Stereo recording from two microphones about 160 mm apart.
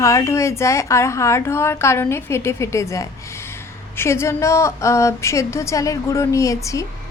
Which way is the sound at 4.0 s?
15° left (ahead or behind).